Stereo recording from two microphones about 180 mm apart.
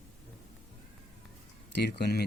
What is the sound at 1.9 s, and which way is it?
Speech, 65° left (ahead or behind).